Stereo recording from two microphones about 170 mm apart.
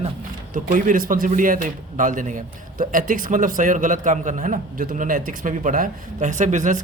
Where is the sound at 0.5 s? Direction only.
50° right (ahead or behind).